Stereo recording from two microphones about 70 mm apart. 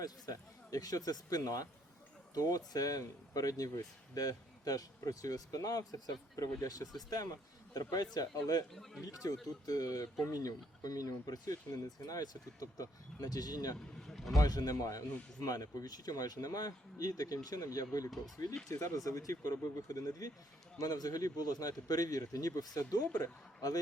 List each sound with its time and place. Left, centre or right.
0.0 s speech: left
8.7 s speech: centre
9.2 s speech: left
14.1 s vehicle: centre
14.3 s speech: left